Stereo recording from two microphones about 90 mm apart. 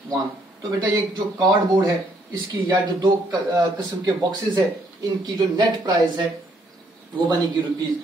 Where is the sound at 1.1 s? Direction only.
55° right (ahead or behind).